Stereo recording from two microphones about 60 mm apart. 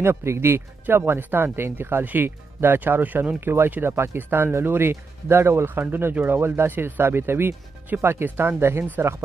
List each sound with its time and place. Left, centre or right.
0.0 s speech: right